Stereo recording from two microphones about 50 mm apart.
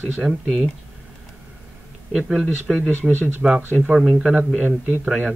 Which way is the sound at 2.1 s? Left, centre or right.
Centre.